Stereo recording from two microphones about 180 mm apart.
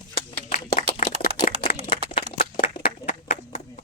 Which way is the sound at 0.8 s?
45° left (ahead or behind).